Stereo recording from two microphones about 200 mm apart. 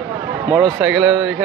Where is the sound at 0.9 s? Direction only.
5° right (ahead or behind).